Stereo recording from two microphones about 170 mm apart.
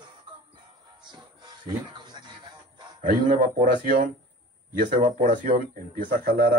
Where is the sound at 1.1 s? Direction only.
25° right (ahead or behind).